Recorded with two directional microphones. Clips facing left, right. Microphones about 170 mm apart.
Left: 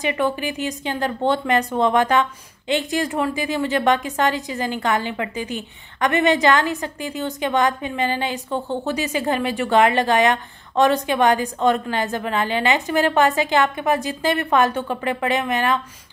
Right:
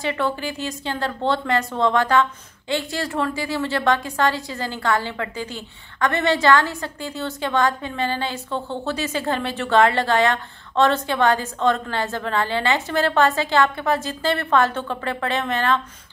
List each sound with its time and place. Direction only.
0.0 s a woman's voice: 15° left (ahead or behind)